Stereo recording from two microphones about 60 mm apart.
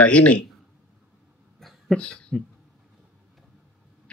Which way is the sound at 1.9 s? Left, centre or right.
Centre.